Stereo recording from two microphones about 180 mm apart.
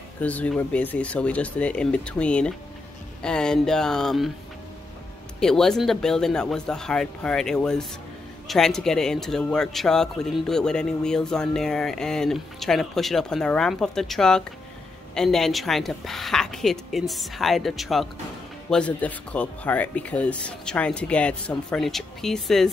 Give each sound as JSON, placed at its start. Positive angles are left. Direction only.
{"t": 0.2, "sound": "speech", "side_deg": 10}
{"t": 5.4, "sound": "speech", "side_deg": 5}